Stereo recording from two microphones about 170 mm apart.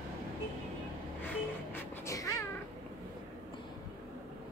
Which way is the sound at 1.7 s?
20° left (ahead or behind).